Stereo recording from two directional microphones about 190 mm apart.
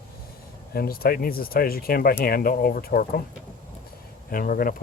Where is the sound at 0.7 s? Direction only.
50° left (ahead or behind).